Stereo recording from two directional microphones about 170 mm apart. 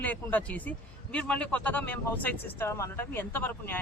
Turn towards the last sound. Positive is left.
turn(degrees=10)  # may be behind; listen again after turning